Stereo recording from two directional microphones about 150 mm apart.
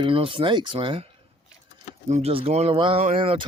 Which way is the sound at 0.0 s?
35° right (ahead or behind).